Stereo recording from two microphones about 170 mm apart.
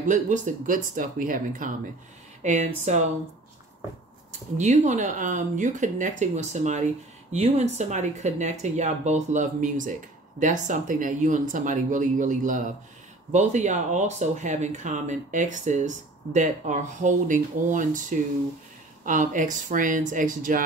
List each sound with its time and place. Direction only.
0.0 s speech: 45° right (ahead or behind)
4.6 s speech: 45° right (ahead or behind)